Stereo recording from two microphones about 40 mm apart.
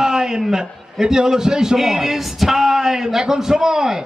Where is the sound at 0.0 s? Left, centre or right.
Centre.